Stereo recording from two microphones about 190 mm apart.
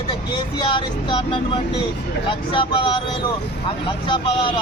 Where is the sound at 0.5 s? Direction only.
25° left (ahead or behind).